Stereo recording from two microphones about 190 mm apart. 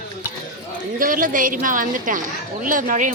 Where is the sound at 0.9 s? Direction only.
45° right (ahead or behind).